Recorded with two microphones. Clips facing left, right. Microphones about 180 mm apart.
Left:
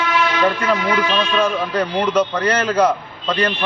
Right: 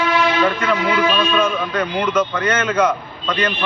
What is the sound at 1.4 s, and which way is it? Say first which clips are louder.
A man's voice: left 1 dB; 35° left (ahead or behind).